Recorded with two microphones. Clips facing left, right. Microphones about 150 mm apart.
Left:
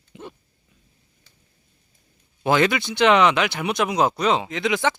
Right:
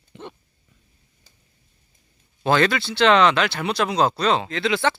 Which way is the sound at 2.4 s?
15° left (ahead or behind).